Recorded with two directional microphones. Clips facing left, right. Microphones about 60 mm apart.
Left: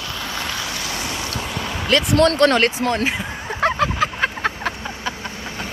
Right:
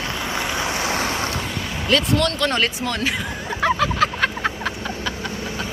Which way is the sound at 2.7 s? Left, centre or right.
Left.